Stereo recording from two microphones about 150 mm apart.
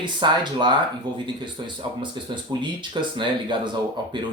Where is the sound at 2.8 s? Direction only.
30° right (ahead or behind).